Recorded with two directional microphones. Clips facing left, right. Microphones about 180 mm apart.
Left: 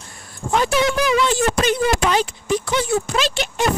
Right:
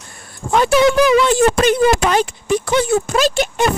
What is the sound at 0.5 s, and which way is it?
Speech, 65° right (ahead or behind).